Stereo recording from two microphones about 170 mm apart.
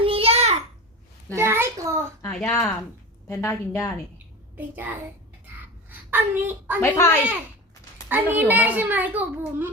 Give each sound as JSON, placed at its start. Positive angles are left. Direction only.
{"t": 0.0, "sound": "a sound", "side_deg": -35}
{"t": 1.4, "sound": "a sound", "side_deg": -15}
{"t": 2.2, "sound": "a woman's voice", "side_deg": 15}
{"t": 4.5, "sound": "a child's voice", "side_deg": -10}
{"t": 6.9, "sound": "speech", "side_deg": 15}
{"t": 8.1, "sound": "a child's voice", "side_deg": -10}